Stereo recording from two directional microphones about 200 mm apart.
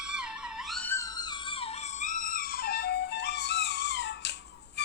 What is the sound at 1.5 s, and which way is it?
Music, 35° left (ahead or behind).